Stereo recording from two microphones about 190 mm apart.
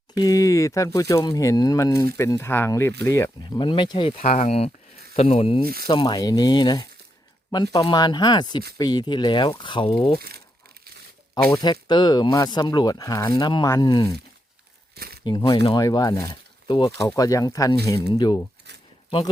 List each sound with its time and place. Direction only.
0.2 s speech: 20° left (ahead or behind)
3.4 s speech: 25° left (ahead or behind)
4.2 s speech: 40° left (ahead or behind)
5.6 s speech: 50° right (ahead or behind)
5.9 s speech: 25° left (ahead or behind)
10.2 s speech: 55° right (ahead or behind)
11.5 s speech: 20° left (ahead or behind)
14.9 s a sound: 55° right (ahead or behind)
15.2 s speech: 20° left (ahead or behind)